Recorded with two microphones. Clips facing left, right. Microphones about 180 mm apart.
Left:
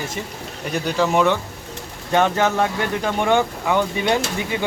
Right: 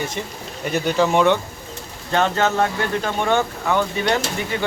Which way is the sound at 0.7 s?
Centre (ahead or behind).